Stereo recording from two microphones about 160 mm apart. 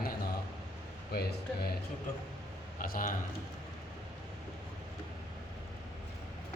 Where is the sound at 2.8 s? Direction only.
60° left (ahead or behind).